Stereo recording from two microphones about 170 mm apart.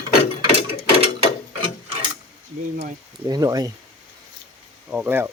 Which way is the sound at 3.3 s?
20° right (ahead or behind).